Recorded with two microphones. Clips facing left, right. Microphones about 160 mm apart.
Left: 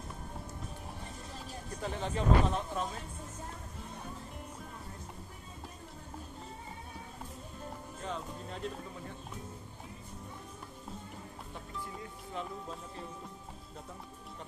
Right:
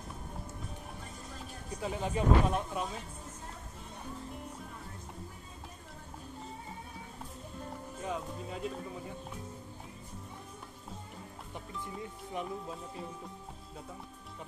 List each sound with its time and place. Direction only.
1.8 s speech: 10° right (ahead or behind)
8.0 s speech: 10° right (ahead or behind)
12.4 s speech: 15° right (ahead or behind)